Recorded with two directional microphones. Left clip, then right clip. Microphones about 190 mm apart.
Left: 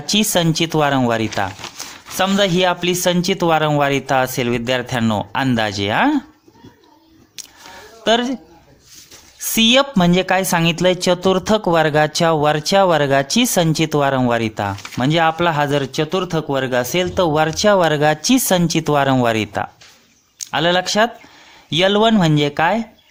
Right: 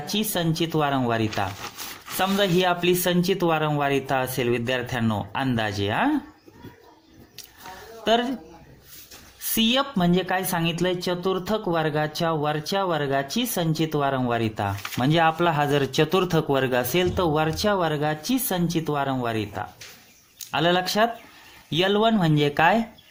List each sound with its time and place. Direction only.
0.0 s speech: 30° left (ahead or behind)
8.0 s speech: 20° left (ahead or behind)
9.6 s speech: 25° left (ahead or behind)